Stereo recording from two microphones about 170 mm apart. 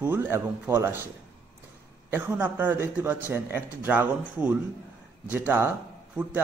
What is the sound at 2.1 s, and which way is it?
A man's voice, 10° right (ahead or behind).